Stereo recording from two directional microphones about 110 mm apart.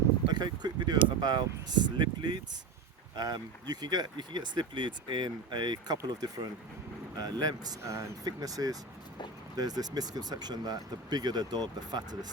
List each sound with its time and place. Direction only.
0.3 s speech: 40° right (ahead or behind)